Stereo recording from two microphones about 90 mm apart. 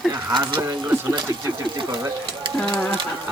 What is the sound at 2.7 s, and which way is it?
Speech, 10° left (ahead or behind).